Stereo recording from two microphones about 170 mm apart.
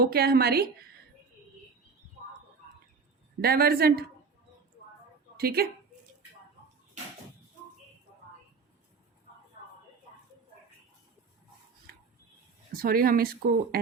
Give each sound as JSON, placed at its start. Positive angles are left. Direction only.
{"t": 0.0, "sound": "speech", "side_deg": -65}
{"t": 3.4, "sound": "speech", "side_deg": -65}
{"t": 5.4, "sound": "a woman's voice", "side_deg": -65}
{"t": 12.7, "sound": "speech", "side_deg": -60}